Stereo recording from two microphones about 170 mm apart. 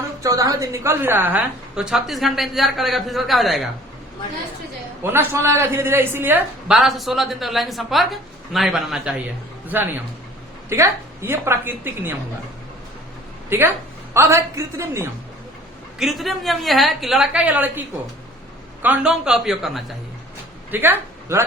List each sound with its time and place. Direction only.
0.2 s a man's voice: 20° right (ahead or behind); by 3.7 s centre (ahead or behind)
5.0 s a man's voice: 15° right (ahead or behind)
10.7 s a woman's voice: 15° right (ahead or behind)
13.5 s a woman's voice: 15° right (ahead or behind)
16.0 s a man's voice: centre (ahead or behind)
20.7 s a man's voice: 10° right (ahead or behind)